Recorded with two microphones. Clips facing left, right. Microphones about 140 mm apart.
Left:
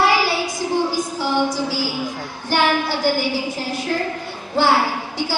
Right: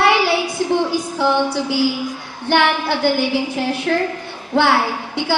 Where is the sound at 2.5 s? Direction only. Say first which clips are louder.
Right 2 dB; 65° right (ahead or behind).